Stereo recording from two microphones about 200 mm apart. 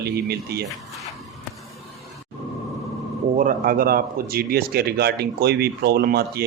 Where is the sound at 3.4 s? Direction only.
45° right (ahead or behind).